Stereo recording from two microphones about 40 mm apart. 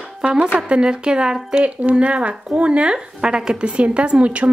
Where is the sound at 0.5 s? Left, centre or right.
Right.